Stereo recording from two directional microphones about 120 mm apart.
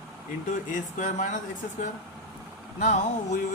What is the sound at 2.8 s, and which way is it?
Speech, 90° left.